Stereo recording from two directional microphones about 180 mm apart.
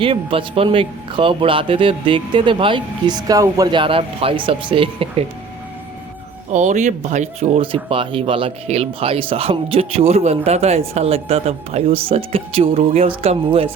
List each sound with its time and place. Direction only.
0.0 s speech: 30° right (ahead or behind)
6.5 s speech: 40° right (ahead or behind)